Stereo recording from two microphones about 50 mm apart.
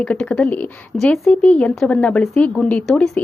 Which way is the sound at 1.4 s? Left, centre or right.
Left.